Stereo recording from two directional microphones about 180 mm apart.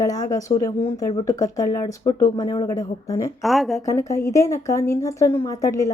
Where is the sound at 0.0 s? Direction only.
20° left (ahead or behind).